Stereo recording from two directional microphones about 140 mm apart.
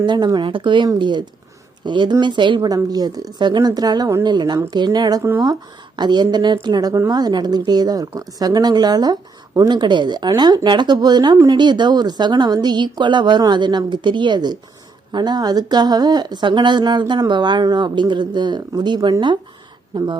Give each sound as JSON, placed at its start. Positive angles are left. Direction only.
{"t": 0.0, "sound": "a woman's voice", "side_deg": -35}